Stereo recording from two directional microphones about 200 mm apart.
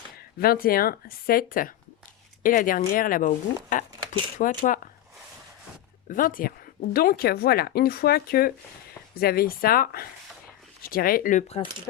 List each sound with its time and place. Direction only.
0.2 s speech: 50° left (ahead or behind)
6.1 s speech: 45° left (ahead or behind)